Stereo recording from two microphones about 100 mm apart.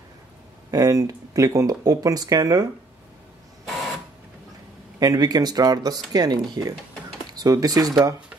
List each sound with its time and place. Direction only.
0.7 s speech: 40° right (ahead or behind)
3.6 s printer: centre (ahead or behind)
5.0 s speech: 40° right (ahead or behind)